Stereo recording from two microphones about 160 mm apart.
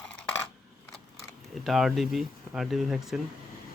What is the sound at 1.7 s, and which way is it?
Speech, centre (ahead or behind).